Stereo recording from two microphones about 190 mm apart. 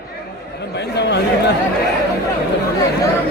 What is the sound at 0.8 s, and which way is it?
Speech, 65° left (ahead or behind).